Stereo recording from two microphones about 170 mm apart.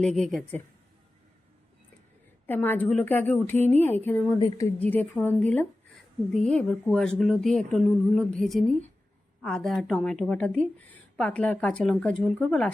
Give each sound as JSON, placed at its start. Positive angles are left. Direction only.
{"t": 0.0, "sound": "a woman's voice", "side_deg": 0}
{"t": 2.5, "sound": "a woman's voice", "side_deg": 10}
{"t": 4.4, "sound": "a woman's voice", "side_deg": 20}
{"t": 4.8, "sound": "a woman's voice", "side_deg": 10}